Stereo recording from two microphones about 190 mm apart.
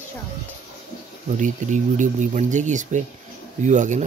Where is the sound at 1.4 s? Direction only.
40° right (ahead or behind).